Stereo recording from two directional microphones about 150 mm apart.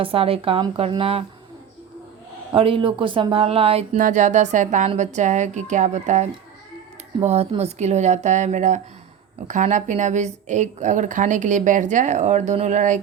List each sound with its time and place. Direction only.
0.0 s speech: 40° right (ahead or behind)
2.5 s speech: 35° right (ahead or behind)
3.9 s a woman's voice: 60° right (ahead or behind)